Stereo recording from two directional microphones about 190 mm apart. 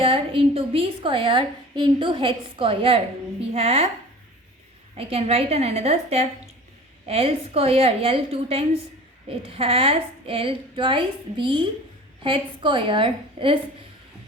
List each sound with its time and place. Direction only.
0.0 s a woman's voice: 30° right (ahead or behind)
4.9 s a woman's voice: 30° right (ahead or behind)